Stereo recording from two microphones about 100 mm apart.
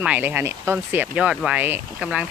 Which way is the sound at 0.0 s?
15° right (ahead or behind).